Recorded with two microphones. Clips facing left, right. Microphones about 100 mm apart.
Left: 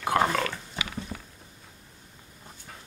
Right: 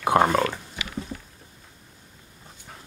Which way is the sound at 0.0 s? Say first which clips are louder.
Right 5 dB; 30° right (ahead or behind).